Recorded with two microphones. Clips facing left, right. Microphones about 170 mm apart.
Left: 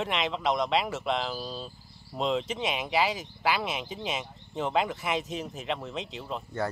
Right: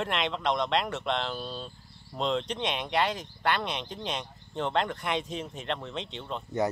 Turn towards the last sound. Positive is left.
turn(degrees=5)  # may be behind; listen again after turning